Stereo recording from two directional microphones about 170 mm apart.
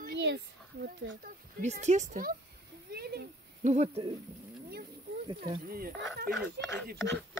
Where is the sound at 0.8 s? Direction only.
60° right (ahead or behind).